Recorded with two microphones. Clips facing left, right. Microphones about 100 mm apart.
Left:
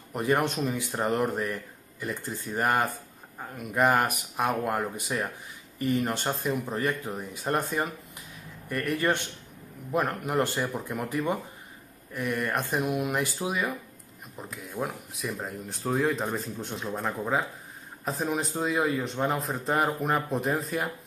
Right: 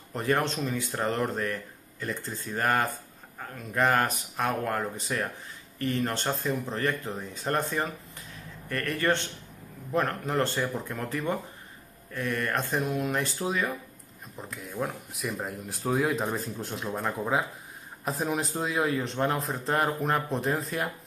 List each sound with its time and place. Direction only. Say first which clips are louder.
0.1 s speech: left 1 dB; 15° left (ahead or behind)
14.5 s speech: even; centre (ahead or behind)